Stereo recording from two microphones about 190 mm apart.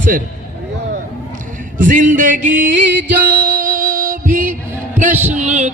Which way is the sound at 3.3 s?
45° right (ahead or behind).